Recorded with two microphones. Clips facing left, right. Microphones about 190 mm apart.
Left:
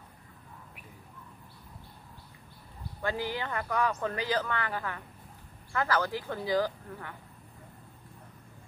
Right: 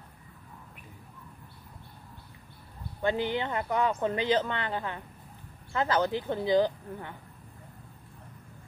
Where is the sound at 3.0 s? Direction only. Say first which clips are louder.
Right 4 dB; 20° right (ahead or behind).